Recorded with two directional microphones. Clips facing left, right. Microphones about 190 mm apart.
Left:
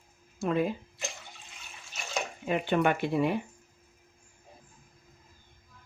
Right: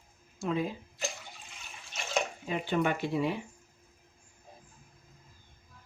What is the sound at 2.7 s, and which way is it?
Speech, 60° left (ahead or behind).